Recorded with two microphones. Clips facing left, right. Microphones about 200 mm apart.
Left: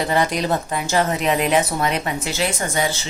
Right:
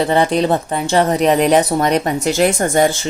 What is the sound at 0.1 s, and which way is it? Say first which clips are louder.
Speech: right 6 dB; 30° right (ahead or behind).